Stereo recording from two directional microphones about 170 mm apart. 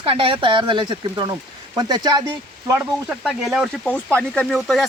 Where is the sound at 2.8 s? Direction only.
5° right (ahead or behind).